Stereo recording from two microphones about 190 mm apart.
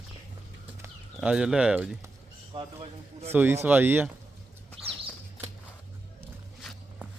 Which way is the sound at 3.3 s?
10° right (ahead or behind).